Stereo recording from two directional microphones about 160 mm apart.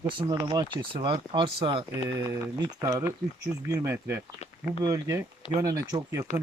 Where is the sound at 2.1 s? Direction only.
20° right (ahead or behind).